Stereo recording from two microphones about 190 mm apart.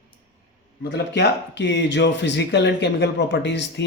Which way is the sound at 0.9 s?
65° left (ahead or behind).